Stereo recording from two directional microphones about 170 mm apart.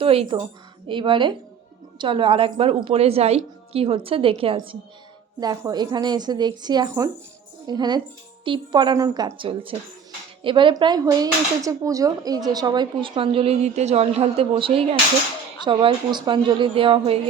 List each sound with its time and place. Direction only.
0.0 s a woman's voice: 35° right (ahead or behind)